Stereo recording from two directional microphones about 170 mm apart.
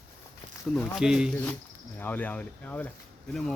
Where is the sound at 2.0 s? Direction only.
10° left (ahead or behind).